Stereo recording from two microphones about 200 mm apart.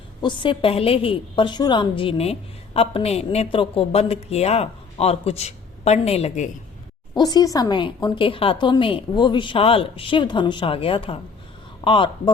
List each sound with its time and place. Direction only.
0.2 s a woman's voice: 25° left (ahead or behind)
7.1 s a woman's voice: 20° left (ahead or behind)